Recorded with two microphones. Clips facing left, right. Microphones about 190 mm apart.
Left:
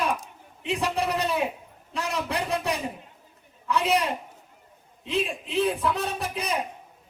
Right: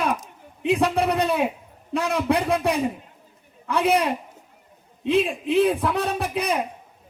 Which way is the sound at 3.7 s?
55° right (ahead or behind).